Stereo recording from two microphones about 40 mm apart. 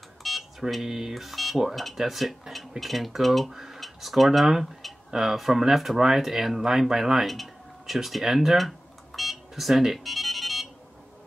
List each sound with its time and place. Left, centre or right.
0.2 s speech: centre
9.9 s music: centre